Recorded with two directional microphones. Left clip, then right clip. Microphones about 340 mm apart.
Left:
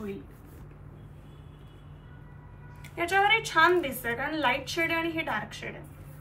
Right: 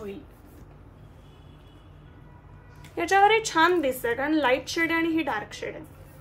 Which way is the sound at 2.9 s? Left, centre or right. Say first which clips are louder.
Right 4 dB; right.